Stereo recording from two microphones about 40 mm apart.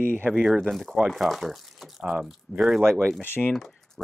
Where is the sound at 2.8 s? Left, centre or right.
Right.